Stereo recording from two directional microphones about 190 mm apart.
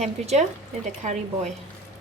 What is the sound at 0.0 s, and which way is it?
Speech, 35° right (ahead or behind).